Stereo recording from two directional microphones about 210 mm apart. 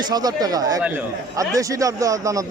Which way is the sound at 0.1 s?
20° right (ahead or behind).